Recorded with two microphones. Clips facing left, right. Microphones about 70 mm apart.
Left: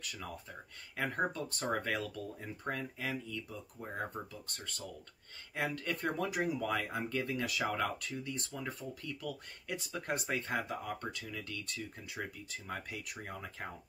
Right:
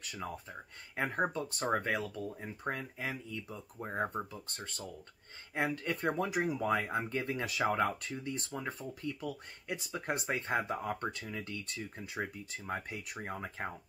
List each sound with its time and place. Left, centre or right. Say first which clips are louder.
0.0 s speech: right 3 dB; right